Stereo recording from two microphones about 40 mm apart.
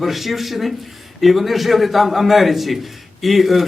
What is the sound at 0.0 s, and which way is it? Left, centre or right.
Speech, centre.